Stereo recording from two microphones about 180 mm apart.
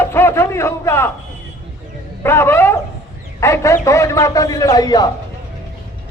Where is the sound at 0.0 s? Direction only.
10° left (ahead or behind).